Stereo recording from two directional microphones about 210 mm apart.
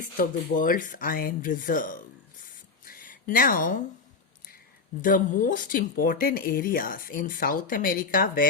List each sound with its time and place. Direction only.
0.0 s speech: 40° left (ahead or behind)
2.8 s a sound: 40° left (ahead or behind)
5.0 s speech: 40° left (ahead or behind)